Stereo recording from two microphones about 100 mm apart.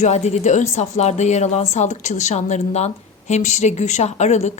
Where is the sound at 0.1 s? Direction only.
90° left.